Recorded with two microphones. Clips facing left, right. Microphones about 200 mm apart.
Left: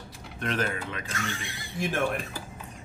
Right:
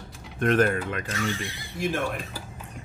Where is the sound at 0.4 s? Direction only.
50° right (ahead or behind).